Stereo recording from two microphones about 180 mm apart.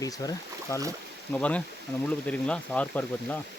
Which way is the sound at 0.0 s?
20° left (ahead or behind).